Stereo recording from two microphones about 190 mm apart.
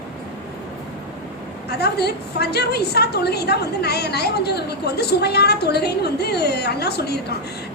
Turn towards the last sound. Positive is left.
turn(degrees=60)  # may be behind; listen again after turning